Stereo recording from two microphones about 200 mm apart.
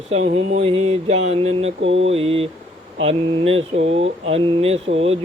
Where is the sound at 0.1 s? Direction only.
30° right (ahead or behind).